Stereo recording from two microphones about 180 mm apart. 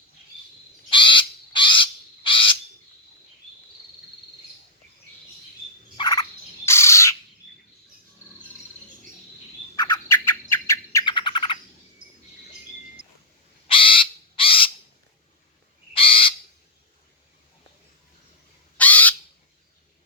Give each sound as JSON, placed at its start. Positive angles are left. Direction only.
{"t": 0.9, "sound": "crow", "side_deg": 25}
{"t": 6.0, "sound": "frog", "side_deg": 20}
{"t": 6.7, "sound": "bird", "side_deg": 15}
{"t": 9.7, "sound": "bird", "side_deg": 20}
{"t": 11.0, "sound": "bird", "side_deg": 25}
{"t": 13.7, "sound": "crow", "side_deg": 30}
{"t": 16.0, "sound": "bird", "side_deg": 30}
{"t": 18.8, "sound": "squawk", "side_deg": 10}